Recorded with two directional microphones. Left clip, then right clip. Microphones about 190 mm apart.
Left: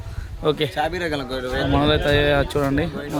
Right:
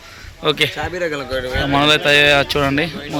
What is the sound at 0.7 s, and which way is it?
Speech, 35° left (ahead or behind).